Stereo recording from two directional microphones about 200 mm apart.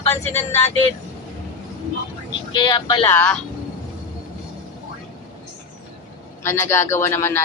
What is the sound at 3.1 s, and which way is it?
Speech, 5° left (ahead or behind).